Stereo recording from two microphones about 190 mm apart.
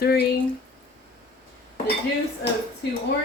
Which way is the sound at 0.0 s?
55° left (ahead or behind).